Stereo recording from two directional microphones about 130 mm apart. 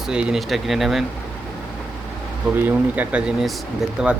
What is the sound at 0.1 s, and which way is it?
Speech, 5° right (ahead or behind).